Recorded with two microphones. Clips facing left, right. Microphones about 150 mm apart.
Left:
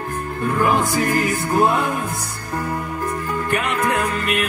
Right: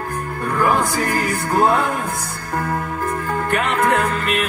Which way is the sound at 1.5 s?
50° right (ahead or behind).